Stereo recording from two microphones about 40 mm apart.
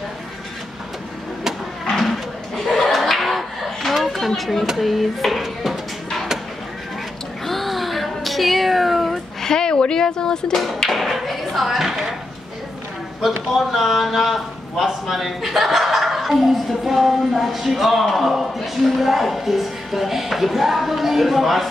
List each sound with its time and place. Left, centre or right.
2.0 s a sound: centre
4.4 s speech: centre
4.6 s a sound: centre
7.4 s meow: centre
9.4 s a woman's voice: centre
10.9 s speech: centre
13.5 s speech: centre